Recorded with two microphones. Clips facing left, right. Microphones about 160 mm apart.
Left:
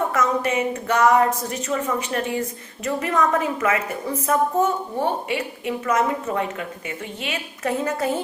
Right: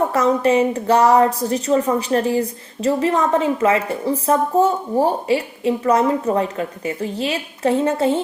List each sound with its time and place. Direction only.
0.1 s a woman's voice: 30° right (ahead or behind)